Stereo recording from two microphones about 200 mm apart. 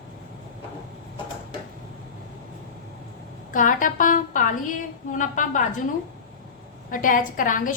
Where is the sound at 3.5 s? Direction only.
40° left (ahead or behind).